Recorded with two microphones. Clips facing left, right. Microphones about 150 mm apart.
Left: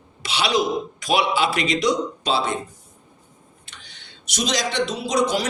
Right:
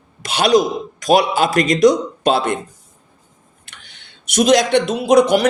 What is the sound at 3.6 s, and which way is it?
Speech, 55° right (ahead or behind).